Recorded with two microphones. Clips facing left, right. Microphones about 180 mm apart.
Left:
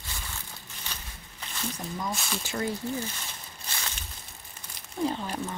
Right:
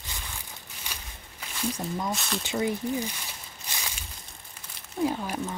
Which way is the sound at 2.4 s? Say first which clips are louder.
Right 4 dB; 20° right (ahead or behind).